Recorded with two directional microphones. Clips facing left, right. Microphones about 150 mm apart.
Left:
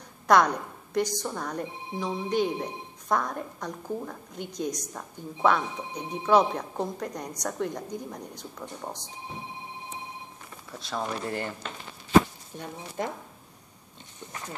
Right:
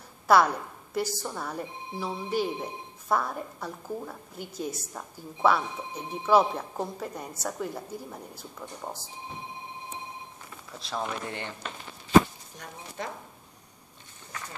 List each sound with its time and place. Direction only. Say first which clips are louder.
0.3 s a woman's voice: even; 5° right (ahead or behind)
10.8 s a woman's voice: left 1 dB; centre (ahead or behind)
12.5 s speech: left 5 dB; 25° left (ahead or behind)